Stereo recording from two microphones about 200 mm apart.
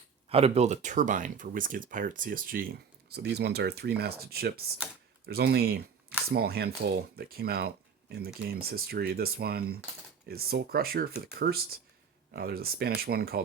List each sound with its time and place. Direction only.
0.3 s speech: 30° right (ahead or behind); by 13.4 s 50° right (ahead or behind)